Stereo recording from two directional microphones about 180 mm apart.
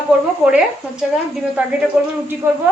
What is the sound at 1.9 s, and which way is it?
Speech, 10° right (ahead or behind).